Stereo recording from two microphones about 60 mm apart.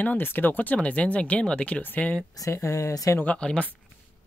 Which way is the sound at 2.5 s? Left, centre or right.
Left.